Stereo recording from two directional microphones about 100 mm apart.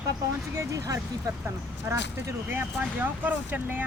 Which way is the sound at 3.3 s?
15° right (ahead or behind).